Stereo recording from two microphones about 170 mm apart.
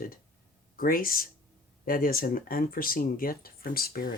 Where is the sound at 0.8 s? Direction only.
55° left (ahead or behind).